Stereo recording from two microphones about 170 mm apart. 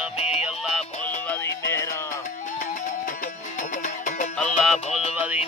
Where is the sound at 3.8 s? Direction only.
50° left (ahead or behind).